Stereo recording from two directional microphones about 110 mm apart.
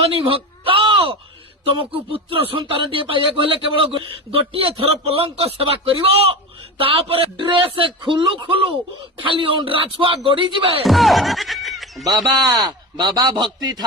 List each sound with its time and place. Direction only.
0.0 s a sound: 60° right (ahead or behind)
1.6 s a man's voice: 50° right (ahead or behind)
10.8 s speech: centre (ahead or behind)
12.0 s a man's voice: 35° right (ahead or behind)